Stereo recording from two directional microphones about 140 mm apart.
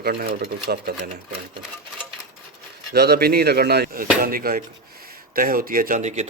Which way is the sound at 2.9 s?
90° right.